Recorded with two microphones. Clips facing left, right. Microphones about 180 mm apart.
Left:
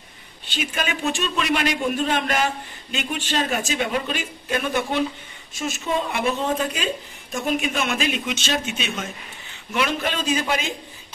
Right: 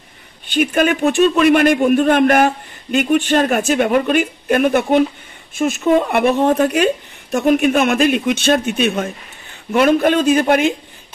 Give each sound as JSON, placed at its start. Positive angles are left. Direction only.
{"t": 0.5, "sound": "a man's voice", "side_deg": -55}